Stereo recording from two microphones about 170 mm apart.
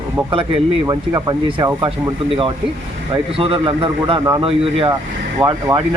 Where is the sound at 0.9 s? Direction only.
25° right (ahead or behind).